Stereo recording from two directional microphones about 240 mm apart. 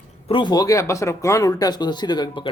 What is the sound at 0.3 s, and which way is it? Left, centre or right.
Speech, centre.